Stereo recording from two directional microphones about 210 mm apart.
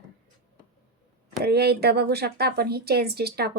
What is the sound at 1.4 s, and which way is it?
A woman's voice, 50° right (ahead or behind).